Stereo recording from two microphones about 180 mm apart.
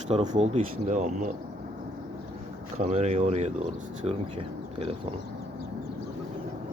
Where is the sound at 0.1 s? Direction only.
40° right (ahead or behind).